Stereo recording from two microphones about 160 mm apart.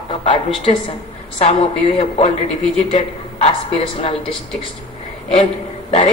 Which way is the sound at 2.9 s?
35° left (ahead or behind).